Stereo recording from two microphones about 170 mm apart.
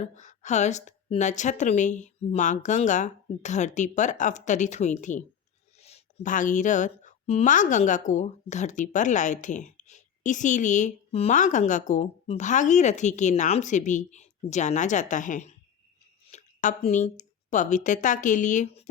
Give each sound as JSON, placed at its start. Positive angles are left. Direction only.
{"t": 0.0, "sound": "a woman's voice", "side_deg": 45}